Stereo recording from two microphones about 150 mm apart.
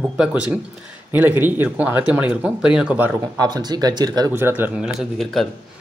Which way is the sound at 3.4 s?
25° right (ahead or behind).